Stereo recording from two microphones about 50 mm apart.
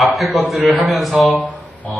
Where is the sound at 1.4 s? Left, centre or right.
Left.